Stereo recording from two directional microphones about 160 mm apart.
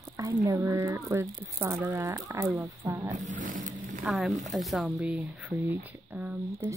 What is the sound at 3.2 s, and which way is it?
Speech, 55° right (ahead or behind).